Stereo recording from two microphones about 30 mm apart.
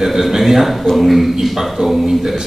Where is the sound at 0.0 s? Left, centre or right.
Centre.